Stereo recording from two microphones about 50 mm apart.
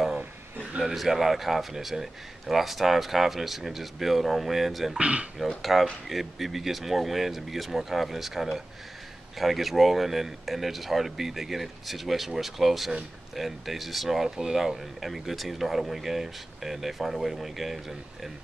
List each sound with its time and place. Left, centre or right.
0.9 s speech: centre
4.9 s speech: right
5.6 s speech: centre